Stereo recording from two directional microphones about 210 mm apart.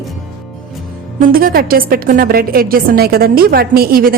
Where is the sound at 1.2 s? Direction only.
45° right (ahead or behind).